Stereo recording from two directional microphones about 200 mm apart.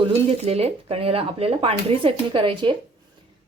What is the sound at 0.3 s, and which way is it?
A woman's voice, 30° right (ahead or behind).